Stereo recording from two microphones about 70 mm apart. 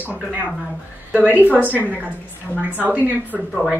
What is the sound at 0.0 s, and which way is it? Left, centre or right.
A woman's voice, right.